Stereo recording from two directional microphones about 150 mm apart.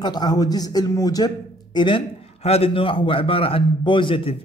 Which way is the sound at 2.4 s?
40° left (ahead or behind).